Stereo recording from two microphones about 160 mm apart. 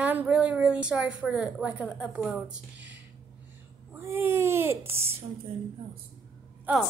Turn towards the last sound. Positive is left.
turn(degrees=-10)  # may be behind; listen again after turning